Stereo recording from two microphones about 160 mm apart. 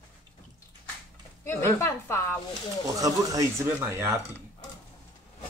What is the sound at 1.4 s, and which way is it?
Speech, 15° left (ahead or behind).